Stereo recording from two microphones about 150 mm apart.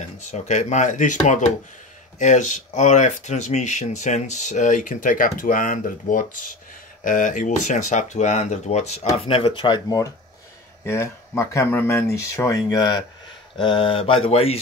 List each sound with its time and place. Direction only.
0.2 s speech: 50° left (ahead or behind)